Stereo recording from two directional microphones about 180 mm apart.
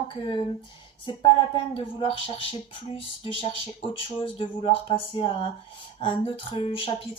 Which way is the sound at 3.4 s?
30° left (ahead or behind).